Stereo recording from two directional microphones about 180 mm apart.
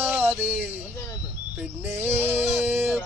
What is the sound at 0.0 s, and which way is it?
Music, 10° right (ahead or behind).